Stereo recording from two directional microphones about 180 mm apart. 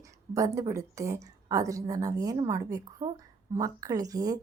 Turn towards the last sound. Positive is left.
turn(degrees=-20)  # may be behind; listen again after turning